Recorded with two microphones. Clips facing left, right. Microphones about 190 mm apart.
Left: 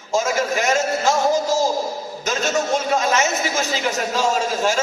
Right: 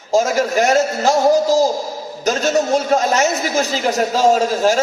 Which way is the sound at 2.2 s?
35° right (ahead or behind).